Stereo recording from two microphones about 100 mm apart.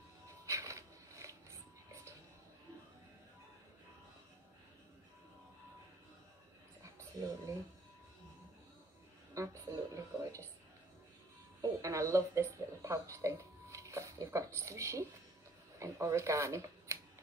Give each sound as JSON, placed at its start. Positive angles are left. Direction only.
{"t": 0.5, "sound": "music", "side_deg": -30}
{"t": 6.8, "sound": "dog", "side_deg": -30}
{"t": 9.3, "sound": "a woman's voice", "side_deg": -30}
{"t": 11.6, "sound": "speech", "side_deg": -30}